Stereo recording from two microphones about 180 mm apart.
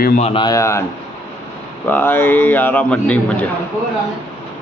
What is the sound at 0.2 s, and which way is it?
Speech, 35° left (ahead or behind).